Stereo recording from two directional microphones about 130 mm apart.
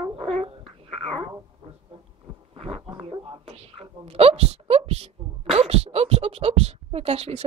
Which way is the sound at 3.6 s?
50° right (ahead or behind).